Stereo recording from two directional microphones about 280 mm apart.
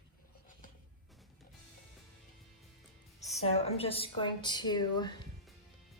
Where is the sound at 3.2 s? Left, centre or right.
Left.